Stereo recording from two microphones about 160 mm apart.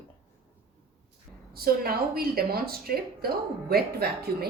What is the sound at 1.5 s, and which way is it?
A woman's voice, 70° right (ahead or behind).